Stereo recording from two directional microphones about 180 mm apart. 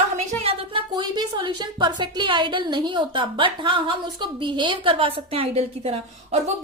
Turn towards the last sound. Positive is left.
turn(degrees=-35)  # may be behind; listen again after turning